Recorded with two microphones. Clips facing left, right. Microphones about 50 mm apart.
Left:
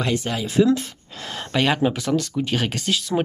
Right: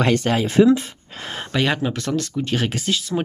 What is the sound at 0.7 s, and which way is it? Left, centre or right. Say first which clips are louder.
Speech: right 3 dB; right.